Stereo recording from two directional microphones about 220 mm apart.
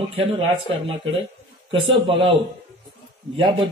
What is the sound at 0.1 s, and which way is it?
Speech, 25° right (ahead or behind).